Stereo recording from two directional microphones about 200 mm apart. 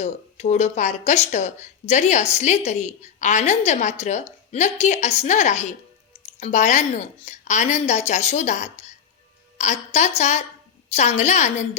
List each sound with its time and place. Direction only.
0.0 s speech: 35° left (ahead or behind)